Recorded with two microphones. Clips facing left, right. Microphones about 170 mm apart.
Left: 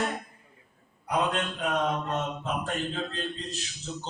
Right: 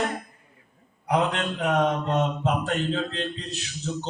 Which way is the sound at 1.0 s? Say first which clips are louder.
Right 4 dB; 70° right (ahead or behind).